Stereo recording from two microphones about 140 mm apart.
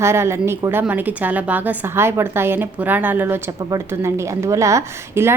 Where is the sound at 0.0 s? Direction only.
20° right (ahead or behind).